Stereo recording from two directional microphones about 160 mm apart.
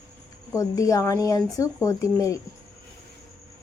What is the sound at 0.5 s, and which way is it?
Speech, 20° left (ahead or behind).